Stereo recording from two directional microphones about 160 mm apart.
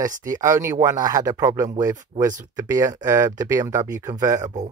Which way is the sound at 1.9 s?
50° right (ahead or behind).